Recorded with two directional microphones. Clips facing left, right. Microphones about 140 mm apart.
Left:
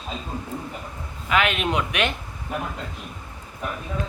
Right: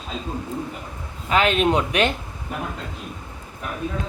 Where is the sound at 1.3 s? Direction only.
35° right (ahead or behind).